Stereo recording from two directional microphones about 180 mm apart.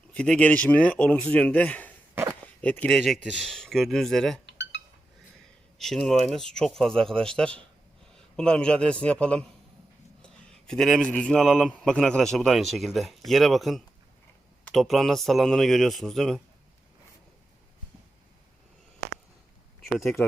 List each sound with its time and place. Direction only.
0.1 s a man's voice: 5° left (ahead or behind)
4.4 s a sound: 80° left
5.8 s a man's voice: centre (ahead or behind)